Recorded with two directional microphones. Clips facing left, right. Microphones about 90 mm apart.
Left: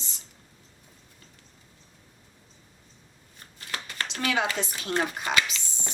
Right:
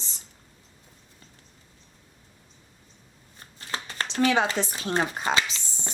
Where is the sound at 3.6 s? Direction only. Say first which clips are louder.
Right 2 dB; 30° right (ahead or behind).